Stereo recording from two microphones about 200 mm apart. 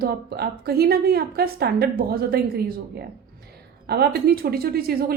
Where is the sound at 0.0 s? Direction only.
50° right (ahead or behind).